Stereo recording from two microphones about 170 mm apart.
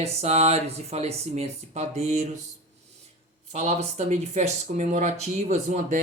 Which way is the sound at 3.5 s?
40° right (ahead or behind).